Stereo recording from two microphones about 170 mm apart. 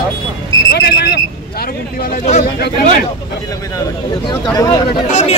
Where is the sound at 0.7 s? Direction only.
75° left (ahead or behind).